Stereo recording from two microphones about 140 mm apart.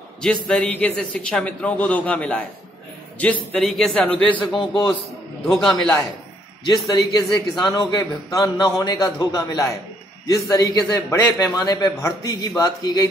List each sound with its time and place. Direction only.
0.2 s a man's voice: 5° left (ahead or behind)
4.6 s a man's voice: 35° left (ahead or behind)
5.5 s a man's voice: centre (ahead or behind)
6.6 s a man's voice: 30° left (ahead or behind)